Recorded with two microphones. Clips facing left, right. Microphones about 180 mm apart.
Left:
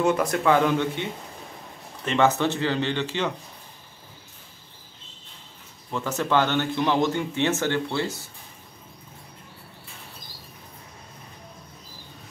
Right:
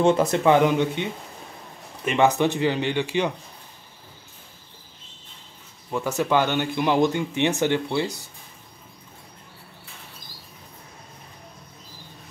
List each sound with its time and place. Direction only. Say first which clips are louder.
0.0 s speech: right 3 dB; 25° right (ahead or behind)
2.0 s speech: right 2 dB; 15° right (ahead or behind)
5.9 s speech: right 2 dB; 10° right (ahead or behind)